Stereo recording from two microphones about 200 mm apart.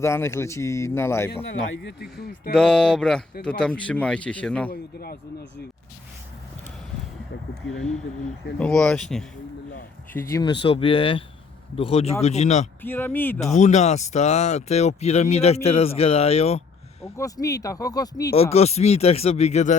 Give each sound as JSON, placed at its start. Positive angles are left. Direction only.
{"t": 0.0, "sound": "speech", "side_deg": 15}
{"t": 1.7, "sound": "speech", "side_deg": 65}
{"t": 2.5, "sound": "a man's voice", "side_deg": 5}
{"t": 4.7, "sound": "speech", "side_deg": 50}
{"t": 8.5, "sound": "a man's voice", "side_deg": 5}
{"t": 10.4, "sound": "speech", "side_deg": 25}
{"t": 12.8, "sound": "speech", "side_deg": 10}
{"t": 13.4, "sound": "speech", "side_deg": 35}
{"t": 17.2, "sound": "speech", "side_deg": 15}
{"t": 18.5, "sound": "speech", "side_deg": 30}